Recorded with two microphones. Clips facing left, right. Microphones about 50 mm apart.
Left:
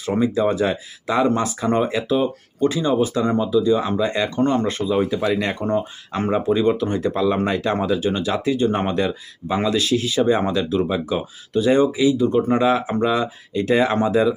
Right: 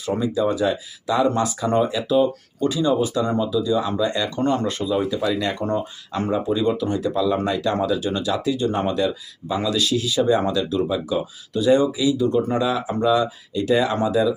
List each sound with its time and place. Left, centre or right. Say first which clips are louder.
0.0 s speech: left 2 dB; left
5.5 s speech: left 2 dB; centre
6.1 s speech: left 2 dB; left